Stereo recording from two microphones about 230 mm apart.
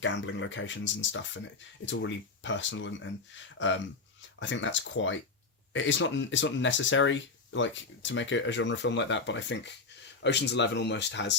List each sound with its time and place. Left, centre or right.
0.0 s speech: left